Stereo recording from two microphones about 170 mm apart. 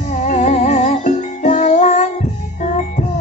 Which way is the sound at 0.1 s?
45° left (ahead or behind).